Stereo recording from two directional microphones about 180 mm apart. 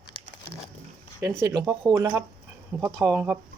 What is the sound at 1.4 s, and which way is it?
Speech, 20° right (ahead or behind).